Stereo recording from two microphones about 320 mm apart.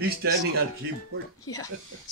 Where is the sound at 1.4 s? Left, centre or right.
Centre.